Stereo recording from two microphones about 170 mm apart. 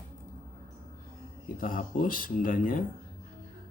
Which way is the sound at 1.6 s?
50° left (ahead or behind).